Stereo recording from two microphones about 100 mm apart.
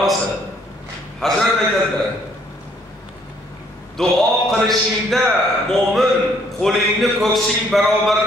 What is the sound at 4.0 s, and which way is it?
A man's voice, 5° left (ahead or behind).